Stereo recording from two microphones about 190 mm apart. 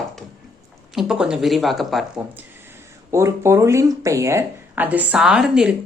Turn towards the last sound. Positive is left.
turn(degrees=-5)  # may be behind; listen again after turning